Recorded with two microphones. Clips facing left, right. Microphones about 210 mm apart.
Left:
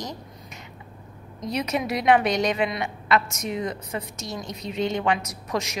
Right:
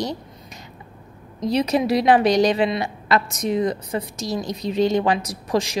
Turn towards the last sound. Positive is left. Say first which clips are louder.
# right 6 dB
turn(degrees=-30)  # may be behind; listen again after turning